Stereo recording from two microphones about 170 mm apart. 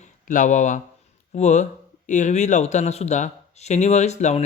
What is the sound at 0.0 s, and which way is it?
Speech, 50° left (ahead or behind).